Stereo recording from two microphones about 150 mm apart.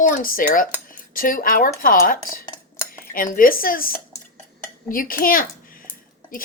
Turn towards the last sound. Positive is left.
turn(degrees=70)  # may be behind; listen again after turning